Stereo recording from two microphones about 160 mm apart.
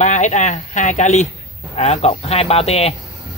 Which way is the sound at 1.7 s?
45° left (ahead or behind).